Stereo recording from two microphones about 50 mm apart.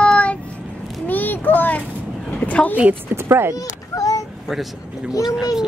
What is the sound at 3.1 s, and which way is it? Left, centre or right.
Speech, right.